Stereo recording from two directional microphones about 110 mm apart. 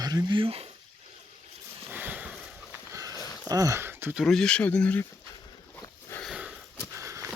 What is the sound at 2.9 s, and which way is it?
Sniff, 35° right (ahead or behind).